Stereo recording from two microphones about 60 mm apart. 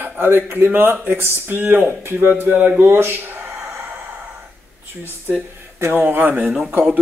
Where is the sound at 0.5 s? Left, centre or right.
Right.